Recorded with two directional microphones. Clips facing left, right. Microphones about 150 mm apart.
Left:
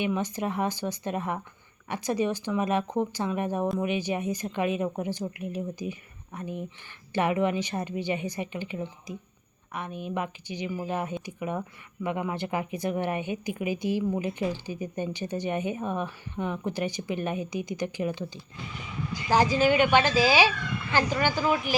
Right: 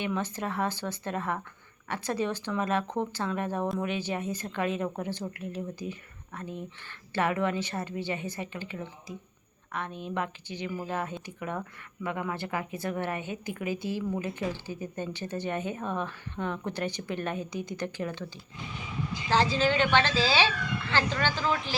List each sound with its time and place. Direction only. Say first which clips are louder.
0.0 s a woman's voice: left 3 dB; 15° left (ahead or behind)
19.3 s a woman's voice: left 3 dB; 15° left (ahead or behind)